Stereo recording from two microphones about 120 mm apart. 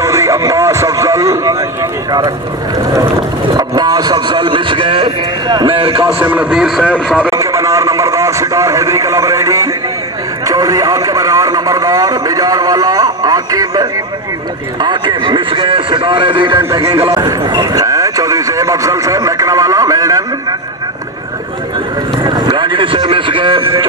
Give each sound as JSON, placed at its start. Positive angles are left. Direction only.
{"t": 0.0, "sound": "a sound", "side_deg": -25}
{"t": 3.5, "sound": "a man's voice", "side_deg": -35}
{"t": 6.1, "sound": "a man's voice", "side_deg": -10}
{"t": 7.2, "sound": "a sound", "side_deg": -25}
{"t": 10.4, "sound": "a man's voice", "side_deg": -30}
{"t": 16.5, "sound": "a man's voice", "side_deg": -30}
{"t": 22.2, "sound": "speech", "side_deg": -35}